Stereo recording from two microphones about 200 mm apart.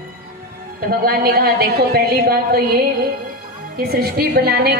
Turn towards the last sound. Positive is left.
turn(degrees=-50)  # may be behind; listen again after turning